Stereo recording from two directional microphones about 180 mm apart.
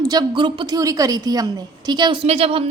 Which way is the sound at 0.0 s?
20° right (ahead or behind).